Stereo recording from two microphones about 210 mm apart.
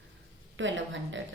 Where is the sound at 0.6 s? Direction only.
65° right (ahead or behind).